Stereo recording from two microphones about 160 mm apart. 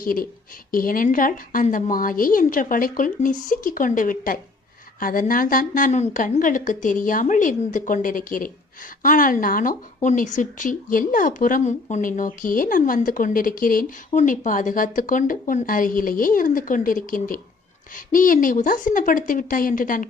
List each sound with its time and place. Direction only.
0.0 s speech: 60° left (ahead or behind)